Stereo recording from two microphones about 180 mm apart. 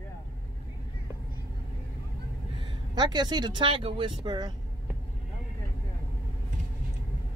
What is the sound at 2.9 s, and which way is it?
Speech, 25° right (ahead or behind).